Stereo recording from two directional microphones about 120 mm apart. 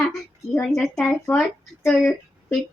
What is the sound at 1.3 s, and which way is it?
Speech, 15° left (ahead or behind).